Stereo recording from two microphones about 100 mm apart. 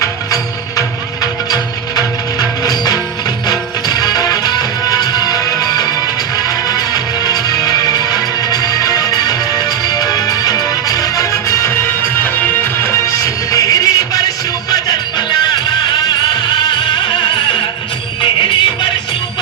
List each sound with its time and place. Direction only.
0.8 s music: 40° left (ahead or behind)
15.3 s music: 45° left (ahead or behind)